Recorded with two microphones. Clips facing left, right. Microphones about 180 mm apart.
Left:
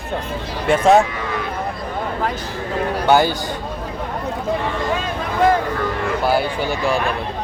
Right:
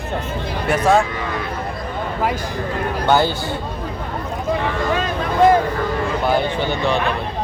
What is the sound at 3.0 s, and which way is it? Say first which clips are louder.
Speech: left 1 dB; 10° left (ahead or behind).